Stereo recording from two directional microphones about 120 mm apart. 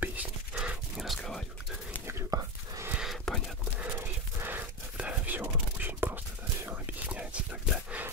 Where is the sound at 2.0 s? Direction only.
25° right (ahead or behind).